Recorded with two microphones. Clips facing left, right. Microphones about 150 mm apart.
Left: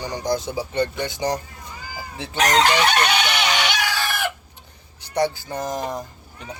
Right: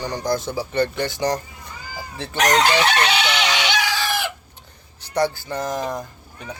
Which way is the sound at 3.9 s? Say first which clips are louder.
Right 1 dB; 60° left (ahead or behind).